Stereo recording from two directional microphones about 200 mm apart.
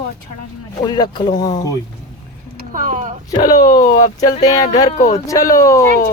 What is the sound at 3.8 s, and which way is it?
Speech, 40° left (ahead or behind).